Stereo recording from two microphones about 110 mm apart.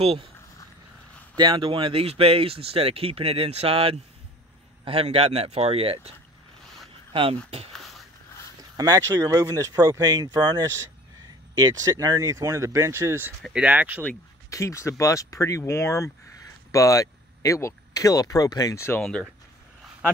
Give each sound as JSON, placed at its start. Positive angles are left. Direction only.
{"t": 0.0, "sound": "speech", "side_deg": -60}
{"t": 1.3, "sound": "speech", "side_deg": -45}
{"t": 7.1, "sound": "speech", "side_deg": -50}
{"t": 8.5, "sound": "speech", "side_deg": -35}
{"t": 13.5, "sound": "speech", "side_deg": -10}
{"t": 14.5, "sound": "speech", "side_deg": 25}